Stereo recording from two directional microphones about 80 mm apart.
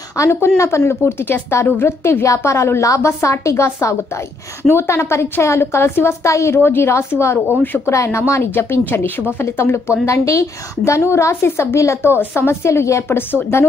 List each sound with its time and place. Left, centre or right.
0.1 s a woman's voice: left
7.9 s a woman's voice: left